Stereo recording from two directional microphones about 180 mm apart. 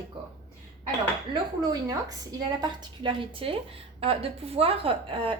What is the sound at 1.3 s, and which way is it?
A woman's voice, 20° right (ahead or behind).